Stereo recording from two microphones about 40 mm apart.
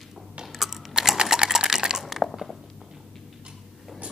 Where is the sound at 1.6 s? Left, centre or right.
Centre.